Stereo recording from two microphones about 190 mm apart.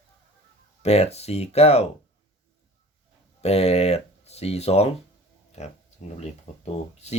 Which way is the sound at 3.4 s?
35° left (ahead or behind).